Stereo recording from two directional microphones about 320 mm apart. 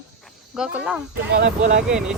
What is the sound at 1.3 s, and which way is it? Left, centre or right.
Speech, right.